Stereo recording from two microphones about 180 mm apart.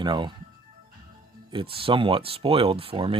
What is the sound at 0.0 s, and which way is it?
Speech, 25° right (ahead or behind).